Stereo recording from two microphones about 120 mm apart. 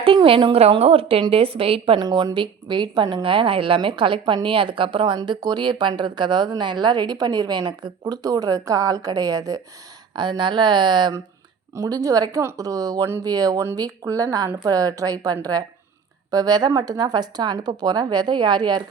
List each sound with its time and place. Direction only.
0.0 s a woman's voice: 50° right (ahead or behind)
0.6 s a woman's voice: 60° right (ahead or behind)
2.0 s a woman's voice: 35° right (ahead or behind)